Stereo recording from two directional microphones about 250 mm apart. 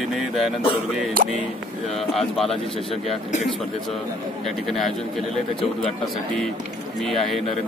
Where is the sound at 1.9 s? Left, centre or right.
Centre.